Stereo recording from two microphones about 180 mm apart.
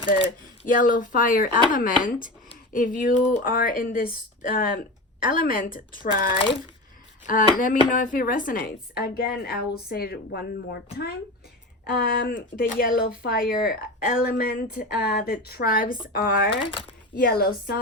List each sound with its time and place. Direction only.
0.1 s speech: 50° left (ahead or behind)
7.3 s speech: 50° left (ahead or behind)
12.3 s speech: 50° left (ahead or behind)
16.5 s speech: 30° left (ahead or behind)
17.2 s speech: 55° left (ahead or behind)